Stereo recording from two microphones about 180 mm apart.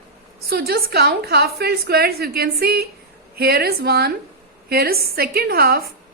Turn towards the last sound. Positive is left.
turn(degrees=-55)  # may be behind; listen again after turning